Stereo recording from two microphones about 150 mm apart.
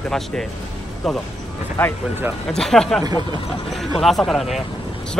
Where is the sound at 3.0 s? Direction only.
25° right (ahead or behind).